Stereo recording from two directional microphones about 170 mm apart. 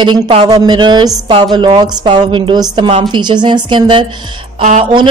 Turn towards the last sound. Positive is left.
turn(degrees=-45)  # may be behind; listen again after turning